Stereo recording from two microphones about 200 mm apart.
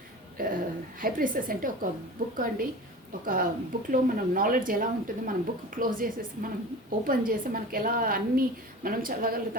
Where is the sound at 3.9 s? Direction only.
45° right (ahead or behind).